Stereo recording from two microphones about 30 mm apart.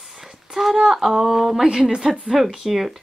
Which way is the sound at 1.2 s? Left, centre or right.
Centre.